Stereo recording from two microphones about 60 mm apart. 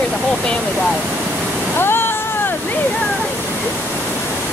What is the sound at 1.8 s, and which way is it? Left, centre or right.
Waves, left.